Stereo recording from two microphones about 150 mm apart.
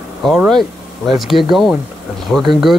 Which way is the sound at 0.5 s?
Centre (ahead or behind).